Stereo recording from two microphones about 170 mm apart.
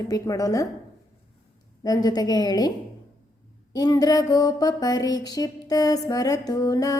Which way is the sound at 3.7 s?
25° left (ahead or behind).